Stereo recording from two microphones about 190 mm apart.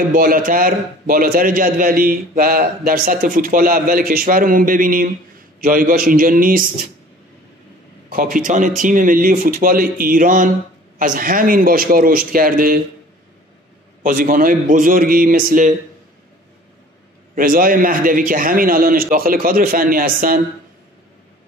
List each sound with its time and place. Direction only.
0.1 s a man's voice: 45° right (ahead or behind)
8.1 s a man's voice: 45° right (ahead or behind)
14.0 s a man's voice: 45° right (ahead or behind)
17.4 s a man's voice: 50° right (ahead or behind)